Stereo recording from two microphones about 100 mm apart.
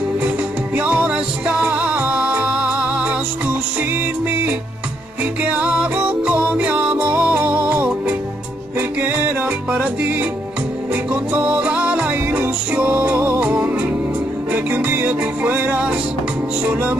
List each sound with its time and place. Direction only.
0.7 s music: 15° right (ahead or behind)